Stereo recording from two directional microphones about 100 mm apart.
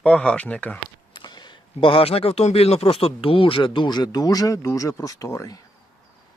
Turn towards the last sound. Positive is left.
turn(degrees=35)  # may be behind; listen again after turning